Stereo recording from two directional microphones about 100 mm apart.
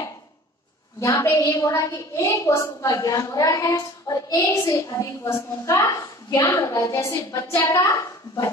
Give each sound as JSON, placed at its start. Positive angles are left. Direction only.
{"t": 1.0, "sound": "a woman's voice", "side_deg": 30}